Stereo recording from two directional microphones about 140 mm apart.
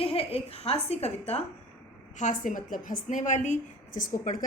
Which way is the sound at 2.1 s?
65° left (ahead or behind).